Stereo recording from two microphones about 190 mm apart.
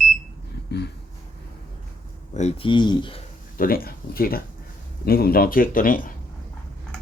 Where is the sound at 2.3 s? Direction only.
35° left (ahead or behind).